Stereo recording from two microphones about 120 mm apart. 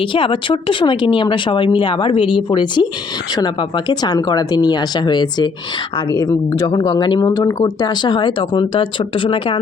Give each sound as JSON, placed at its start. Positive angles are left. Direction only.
{"t": 0.0, "sound": "speech", "side_deg": 45}